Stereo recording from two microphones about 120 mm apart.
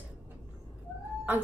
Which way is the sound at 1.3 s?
15° right (ahead or behind).